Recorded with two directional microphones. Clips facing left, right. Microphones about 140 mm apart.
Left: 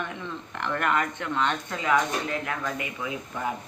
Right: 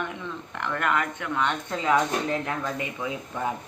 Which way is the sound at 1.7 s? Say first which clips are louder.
Right 4 dB; 25° right (ahead or behind).